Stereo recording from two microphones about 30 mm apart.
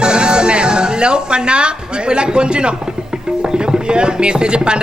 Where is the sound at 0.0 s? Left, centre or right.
Right.